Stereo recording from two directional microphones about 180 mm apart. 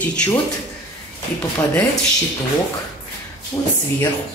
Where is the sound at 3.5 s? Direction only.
15° left (ahead or behind).